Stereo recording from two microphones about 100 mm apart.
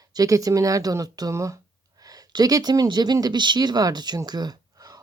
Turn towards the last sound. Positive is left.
turn(degrees=-40)  # may be behind; listen again after turning